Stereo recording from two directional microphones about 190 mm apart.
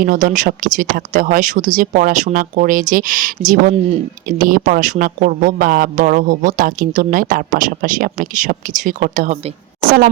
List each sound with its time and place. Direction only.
0.0 s speech: 45° right (ahead or behind)